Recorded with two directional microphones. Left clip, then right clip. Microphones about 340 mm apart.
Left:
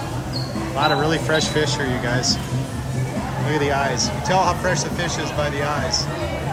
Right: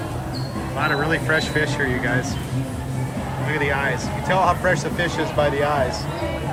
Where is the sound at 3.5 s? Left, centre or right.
Centre.